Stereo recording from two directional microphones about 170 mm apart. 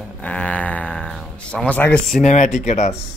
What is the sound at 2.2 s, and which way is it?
Speech, 45° left (ahead or behind).